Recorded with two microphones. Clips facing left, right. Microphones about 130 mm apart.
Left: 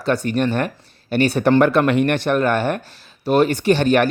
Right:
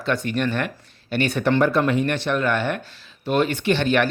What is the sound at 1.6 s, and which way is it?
Speech, 65° left (ahead or behind).